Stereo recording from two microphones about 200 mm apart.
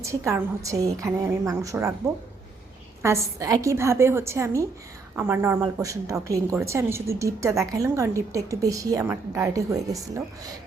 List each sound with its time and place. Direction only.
0.0 s speech: 15° right (ahead or behind)
3.0 s speech: 15° right (ahead or behind)